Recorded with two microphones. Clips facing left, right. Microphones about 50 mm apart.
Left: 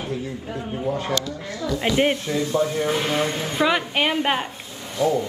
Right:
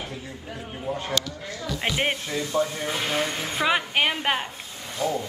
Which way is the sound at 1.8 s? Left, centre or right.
Right.